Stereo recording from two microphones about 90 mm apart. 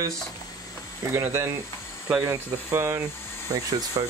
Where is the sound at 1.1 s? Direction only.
25° right (ahead or behind).